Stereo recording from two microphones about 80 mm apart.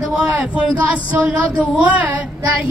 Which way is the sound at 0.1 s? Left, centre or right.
Centre.